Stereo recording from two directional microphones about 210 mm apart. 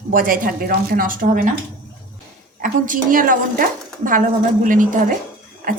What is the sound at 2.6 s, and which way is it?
A woman's voice, 40° right (ahead or behind).